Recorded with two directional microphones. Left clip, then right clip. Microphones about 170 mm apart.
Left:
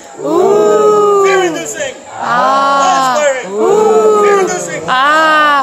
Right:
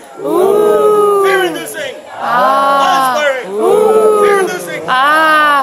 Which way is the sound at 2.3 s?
5° left (ahead or behind).